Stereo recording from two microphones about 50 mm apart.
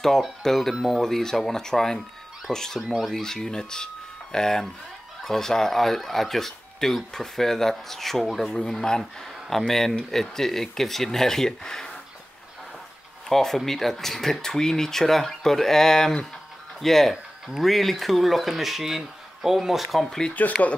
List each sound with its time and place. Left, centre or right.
0.4 s speech: centre
13.3 s speech: centre
17.1 s speech: centre
17.6 s speech: centre
20.4 s speech: left